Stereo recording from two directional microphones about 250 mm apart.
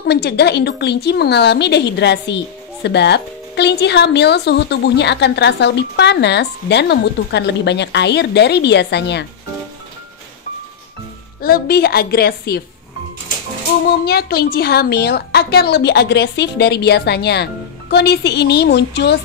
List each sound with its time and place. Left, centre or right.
0.1 s a woman's voice: left
11.4 s a woman's voice: left
13.8 s a woman's voice: left